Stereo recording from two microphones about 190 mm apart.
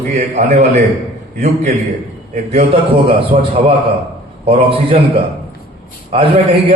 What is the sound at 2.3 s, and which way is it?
A man's voice, 35° right (ahead or behind).